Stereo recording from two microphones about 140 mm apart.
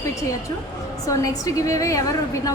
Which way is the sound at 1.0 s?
25° left (ahead or behind).